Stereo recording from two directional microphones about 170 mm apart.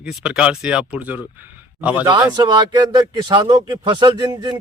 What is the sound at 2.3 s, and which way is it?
A man's voice, 25° right (ahead or behind).